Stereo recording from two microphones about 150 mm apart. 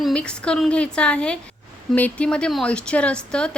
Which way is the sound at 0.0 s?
5° left (ahead or behind).